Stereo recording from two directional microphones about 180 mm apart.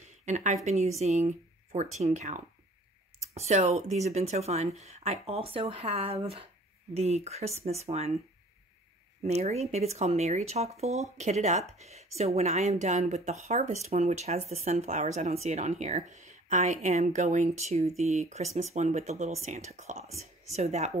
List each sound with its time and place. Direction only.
0.0 s a sound: 40° right (ahead or behind)
0.7 s speech: 40° right (ahead or behind)
9.2 s speech: 35° right (ahead or behind)